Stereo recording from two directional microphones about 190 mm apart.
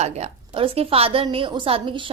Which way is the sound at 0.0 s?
35° right (ahead or behind).